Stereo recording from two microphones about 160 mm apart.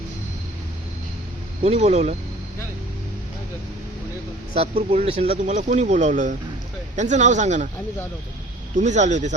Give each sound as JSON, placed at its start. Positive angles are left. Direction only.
{"t": 1.6, "sound": "speech", "side_deg": -45}
{"t": 4.5, "sound": "speech", "side_deg": -40}
{"t": 5.4, "sound": "speech", "side_deg": -50}
{"t": 8.7, "sound": "speech", "side_deg": -50}